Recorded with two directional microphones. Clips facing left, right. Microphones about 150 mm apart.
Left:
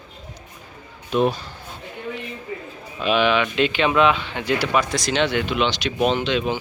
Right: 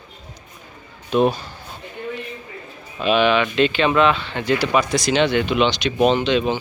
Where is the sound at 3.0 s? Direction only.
5° left (ahead or behind).